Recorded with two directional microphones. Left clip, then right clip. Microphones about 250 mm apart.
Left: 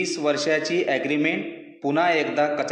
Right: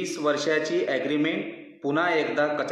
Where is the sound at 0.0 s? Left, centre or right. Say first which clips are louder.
Left 2 dB; left.